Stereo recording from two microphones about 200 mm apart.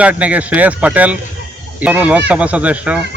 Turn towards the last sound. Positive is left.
turn(degrees=-5)  # may be behind; listen again after turning